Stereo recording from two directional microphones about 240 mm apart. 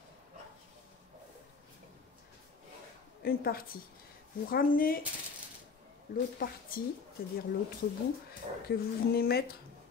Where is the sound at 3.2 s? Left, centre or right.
Left.